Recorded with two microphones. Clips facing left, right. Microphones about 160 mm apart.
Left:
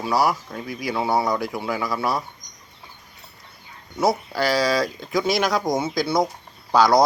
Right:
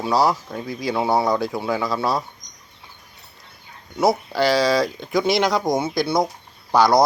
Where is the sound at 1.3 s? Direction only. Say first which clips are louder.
Right 3 dB; 25° right (ahead or behind).